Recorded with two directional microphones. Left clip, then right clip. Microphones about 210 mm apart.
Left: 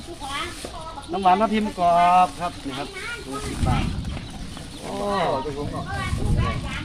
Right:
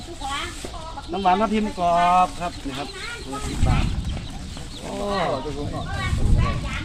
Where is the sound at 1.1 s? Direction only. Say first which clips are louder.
Left 1 dB; 15° right (ahead or behind).